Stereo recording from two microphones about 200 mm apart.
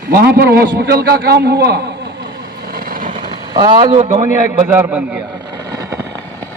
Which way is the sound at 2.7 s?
45° right (ahead or behind).